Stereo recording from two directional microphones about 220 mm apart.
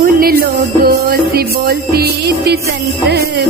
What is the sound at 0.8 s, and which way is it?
Music, 45° right (ahead or behind).